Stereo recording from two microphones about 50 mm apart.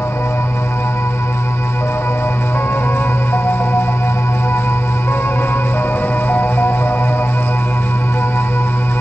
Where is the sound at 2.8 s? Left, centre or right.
Left.